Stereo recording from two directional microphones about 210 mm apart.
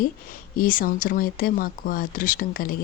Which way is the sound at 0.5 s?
45° left (ahead or behind).